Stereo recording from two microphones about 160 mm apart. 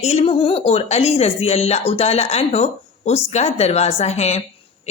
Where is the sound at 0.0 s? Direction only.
40° left (ahead or behind).